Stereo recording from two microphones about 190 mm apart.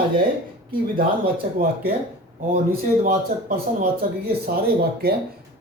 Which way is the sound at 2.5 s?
50° right (ahead or behind).